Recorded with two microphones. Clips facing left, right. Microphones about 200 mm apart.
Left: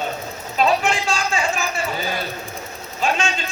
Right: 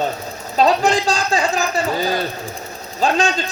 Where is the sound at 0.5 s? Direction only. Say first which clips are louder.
Right 4 dB; 40° right (ahead or behind).